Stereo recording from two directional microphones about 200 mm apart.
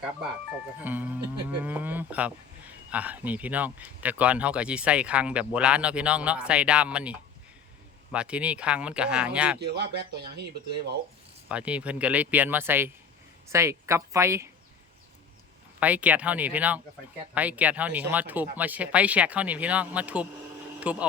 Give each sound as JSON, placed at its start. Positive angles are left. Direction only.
{"t": 0.8, "sound": "speech", "side_deg": -10}
{"t": 9.6, "sound": "speech", "side_deg": -55}
{"t": 11.4, "sound": "speech", "side_deg": -5}
{"t": 15.8, "sound": "speech", "side_deg": -5}